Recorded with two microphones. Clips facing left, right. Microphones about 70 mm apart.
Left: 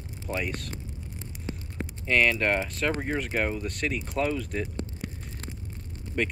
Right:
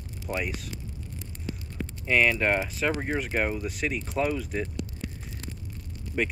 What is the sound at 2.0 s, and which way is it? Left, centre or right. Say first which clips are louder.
Speech: even; centre.